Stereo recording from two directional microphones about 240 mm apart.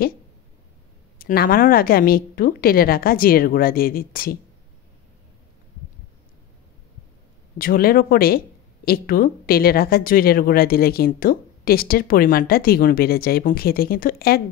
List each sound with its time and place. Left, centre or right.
1.1 s speech: left
7.5 s speech: left